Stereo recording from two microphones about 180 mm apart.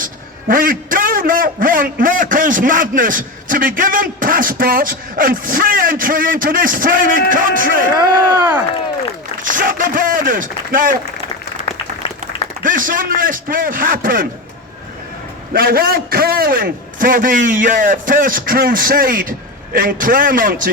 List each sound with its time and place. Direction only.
0.0 s a man's voice: 50° right (ahead or behind)
9.4 s a man's voice: 50° right (ahead or behind)
11.6 s applause: 35° left (ahead or behind)
12.6 s a man's voice: 50° right (ahead or behind)
15.5 s a man's voice: 55° right (ahead or behind)